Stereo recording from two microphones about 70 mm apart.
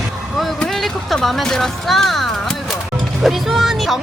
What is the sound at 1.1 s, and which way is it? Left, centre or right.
A woman's voice, centre.